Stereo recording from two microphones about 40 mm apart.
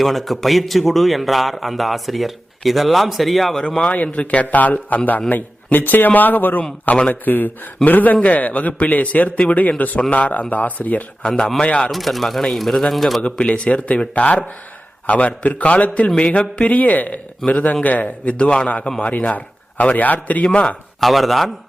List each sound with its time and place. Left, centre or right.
0.0 s a man's voice: centre
3.7 s mantra: centre
3.9 s a man's voice: left
11.3 s speech: centre
11.6 s a man's voice: left
11.9 s a man's voice: centre
13.4 s a man's voice: left
16.1 s mantra: left
16.7 s a man's voice: left
20.5 s a man's voice: left
21.0 s a man's voice: centre